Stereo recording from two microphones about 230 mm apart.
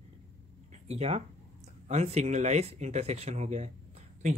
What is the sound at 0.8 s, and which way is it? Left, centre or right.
Speech, right.